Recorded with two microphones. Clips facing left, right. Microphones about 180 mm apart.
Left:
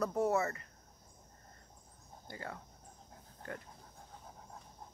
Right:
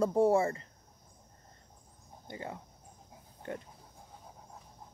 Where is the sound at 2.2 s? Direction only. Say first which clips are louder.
Right 4 dB; 20° right (ahead or behind).